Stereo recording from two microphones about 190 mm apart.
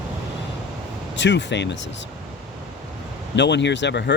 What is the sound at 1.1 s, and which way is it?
Speech, 70° left (ahead or behind).